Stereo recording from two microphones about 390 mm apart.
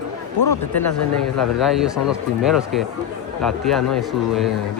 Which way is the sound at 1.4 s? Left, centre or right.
Centre.